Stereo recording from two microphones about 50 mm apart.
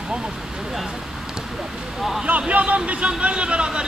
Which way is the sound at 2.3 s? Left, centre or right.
Right.